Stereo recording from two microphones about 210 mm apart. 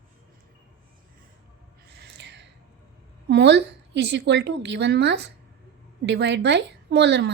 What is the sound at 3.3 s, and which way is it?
A woman's voice, 55° right (ahead or behind).